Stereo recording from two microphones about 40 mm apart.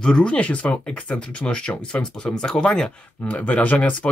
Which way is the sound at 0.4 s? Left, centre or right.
Left.